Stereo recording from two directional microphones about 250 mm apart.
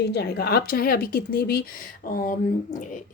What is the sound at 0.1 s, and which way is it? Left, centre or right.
Speech, left.